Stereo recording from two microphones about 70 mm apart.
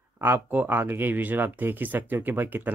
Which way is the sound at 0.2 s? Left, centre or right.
Right.